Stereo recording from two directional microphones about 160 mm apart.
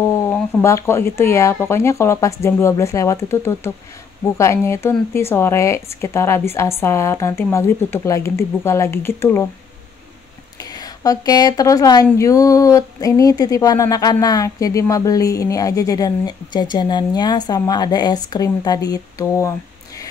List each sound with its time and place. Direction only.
0.0 s speech: 15° left (ahead or behind)
10.6 s speech: 25° left (ahead or behind)